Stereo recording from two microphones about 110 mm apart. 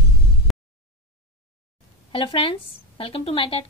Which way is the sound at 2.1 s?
55° left (ahead or behind).